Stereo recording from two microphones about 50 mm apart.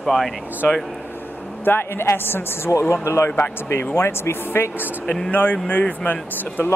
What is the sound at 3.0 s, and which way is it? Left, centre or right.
Speech, left.